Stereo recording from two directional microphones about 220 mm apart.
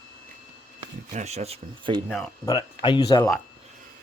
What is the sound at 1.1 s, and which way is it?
Speech, 30° right (ahead or behind).